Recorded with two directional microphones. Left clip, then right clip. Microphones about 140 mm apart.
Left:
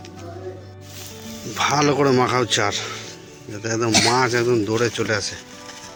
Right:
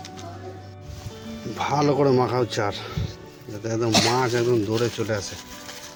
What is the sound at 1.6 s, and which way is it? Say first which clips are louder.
Speech: left 3 dB; centre (ahead or behind).